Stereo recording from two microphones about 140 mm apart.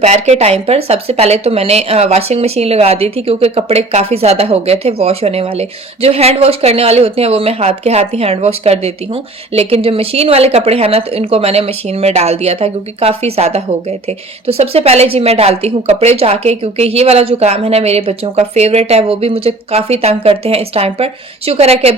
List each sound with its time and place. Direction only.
0.0 s speech: 50° right (ahead or behind)